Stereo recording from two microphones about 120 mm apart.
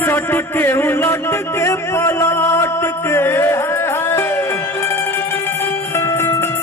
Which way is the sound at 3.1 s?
20° left (ahead or behind).